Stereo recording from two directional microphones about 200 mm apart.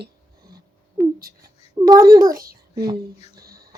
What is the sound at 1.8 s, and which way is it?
A child's voice, 20° right (ahead or behind).